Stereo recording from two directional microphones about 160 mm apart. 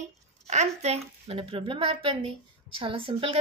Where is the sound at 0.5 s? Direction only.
45° right (ahead or behind).